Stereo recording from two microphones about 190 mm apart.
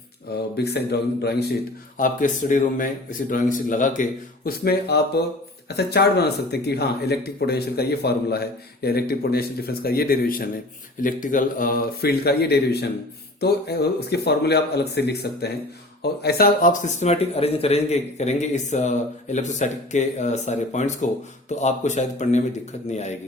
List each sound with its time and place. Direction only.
0.5 s speech: 60° left (ahead or behind)
2.0 s a man's voice: 45° left (ahead or behind)